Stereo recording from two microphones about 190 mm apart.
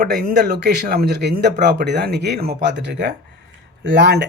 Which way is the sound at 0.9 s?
55° right (ahead or behind).